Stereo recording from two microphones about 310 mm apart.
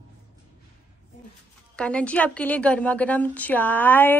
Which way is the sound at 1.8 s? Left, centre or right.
Centre.